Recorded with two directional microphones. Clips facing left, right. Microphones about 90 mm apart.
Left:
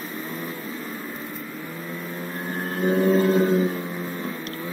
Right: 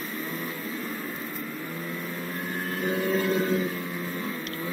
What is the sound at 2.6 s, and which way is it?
Vehicle, 35° left (ahead or behind).